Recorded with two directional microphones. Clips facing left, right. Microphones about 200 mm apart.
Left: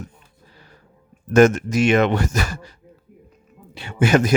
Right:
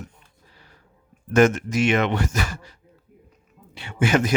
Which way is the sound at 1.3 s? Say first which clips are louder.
Left 4 dB; 40° left (ahead or behind).